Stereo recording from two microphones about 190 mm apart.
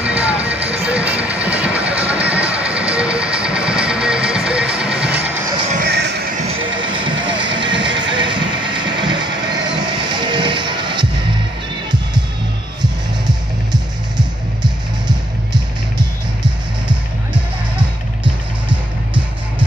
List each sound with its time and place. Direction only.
0.0 s music: 5° right (ahead or behind)
0.6 s music: 30° right (ahead or behind)
1.0 s music: 5° right (ahead or behind)
5.7 s music: 55° right (ahead or behind)
6.3 s music: 30° right (ahead or behind)
13.7 s music: 20° right (ahead or behind)